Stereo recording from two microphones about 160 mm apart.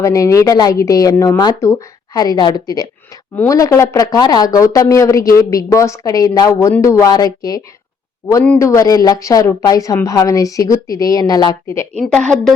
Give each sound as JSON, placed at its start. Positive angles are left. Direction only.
{"t": 0.0, "sound": "speech", "side_deg": 20}
{"t": 11.9, "sound": "a woman's voice", "side_deg": 5}